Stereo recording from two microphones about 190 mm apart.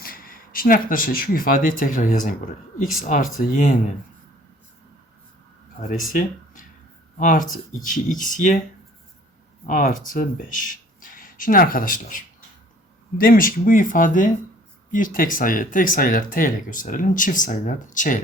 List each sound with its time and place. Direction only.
0.0 s speech: 50° left (ahead or behind)
6.1 s a sound: 45° left (ahead or behind)
7.2 s speech: 45° left (ahead or behind)
9.6 s speech: 45° left (ahead or behind)